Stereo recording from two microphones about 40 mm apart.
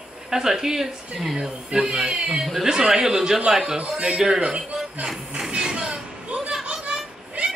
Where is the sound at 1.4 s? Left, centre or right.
Right.